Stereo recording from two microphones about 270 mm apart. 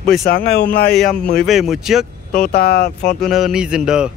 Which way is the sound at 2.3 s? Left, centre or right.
Left.